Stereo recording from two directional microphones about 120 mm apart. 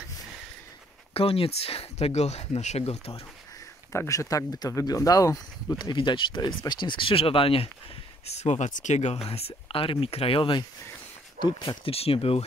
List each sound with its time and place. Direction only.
1.1 s speech: 55° left (ahead or behind)
3.9 s speech: 25° left (ahead or behind); by 7.7 s 50° left (ahead or behind)
8.4 s speech: 75° left (ahead or behind); by 11.9 s 40° left (ahead or behind)
11.9 s speech: 55° left (ahead or behind)